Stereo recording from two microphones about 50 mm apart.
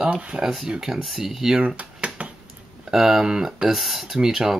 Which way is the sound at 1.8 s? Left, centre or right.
Right.